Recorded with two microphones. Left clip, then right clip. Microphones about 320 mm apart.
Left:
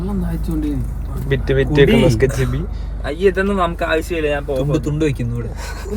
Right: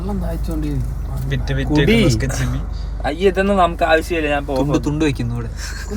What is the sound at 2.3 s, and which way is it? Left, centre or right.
Speech, centre.